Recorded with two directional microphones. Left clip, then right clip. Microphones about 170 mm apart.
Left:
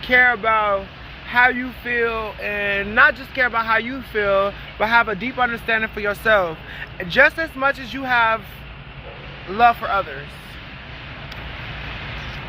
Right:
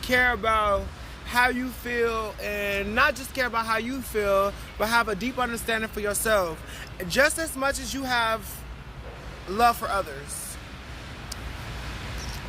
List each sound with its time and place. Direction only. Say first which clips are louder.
0.0 s speech: left 7 dB; 25° right (ahead or behind)
1.3 s speech: left 7 dB; 15° right (ahead or behind)
9.6 s speech: left 6 dB; 15° right (ahead or behind)